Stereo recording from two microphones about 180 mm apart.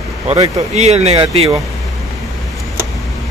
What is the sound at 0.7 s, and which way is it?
Speech, 35° right (ahead or behind).